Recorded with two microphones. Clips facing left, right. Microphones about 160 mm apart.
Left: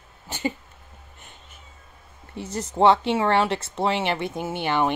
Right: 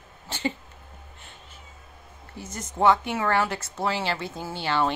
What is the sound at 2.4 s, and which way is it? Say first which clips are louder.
Speech: left 5 dB; 25° left (ahead or behind).